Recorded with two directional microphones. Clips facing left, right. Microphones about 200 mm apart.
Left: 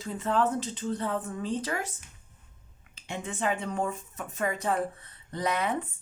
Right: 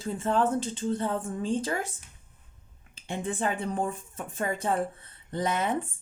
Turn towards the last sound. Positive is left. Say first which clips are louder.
# right 1 dB
turn(degrees=-25)  # may be behind; listen again after turning